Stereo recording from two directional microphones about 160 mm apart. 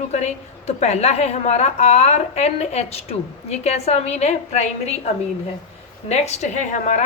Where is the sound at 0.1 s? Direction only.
45° left (ahead or behind).